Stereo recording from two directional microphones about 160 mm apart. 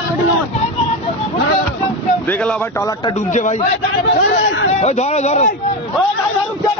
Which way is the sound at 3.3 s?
50° left (ahead or behind).